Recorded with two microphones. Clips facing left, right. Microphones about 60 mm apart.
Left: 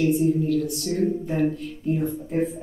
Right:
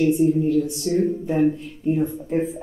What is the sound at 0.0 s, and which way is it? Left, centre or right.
Speech, right.